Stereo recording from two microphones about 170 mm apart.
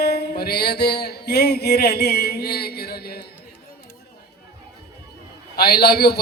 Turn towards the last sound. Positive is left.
turn(degrees=70)  # may be behind; listen again after turning